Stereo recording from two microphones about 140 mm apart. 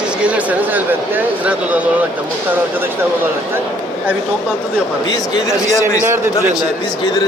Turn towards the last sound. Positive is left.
turn(degrees=-20)  # may be behind; listen again after turning